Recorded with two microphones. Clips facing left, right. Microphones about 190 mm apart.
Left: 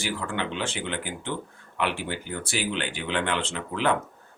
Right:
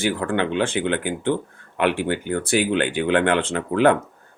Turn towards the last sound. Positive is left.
turn(degrees=-55)  # may be behind; listen again after turning